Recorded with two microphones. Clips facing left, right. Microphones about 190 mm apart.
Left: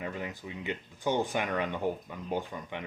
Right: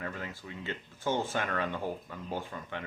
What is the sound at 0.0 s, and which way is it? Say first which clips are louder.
Speech: left 3 dB; 15° left (ahead or behind).